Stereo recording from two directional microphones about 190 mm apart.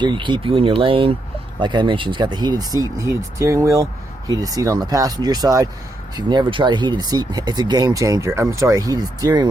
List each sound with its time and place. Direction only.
0.0 s speech: 25° right (ahead or behind)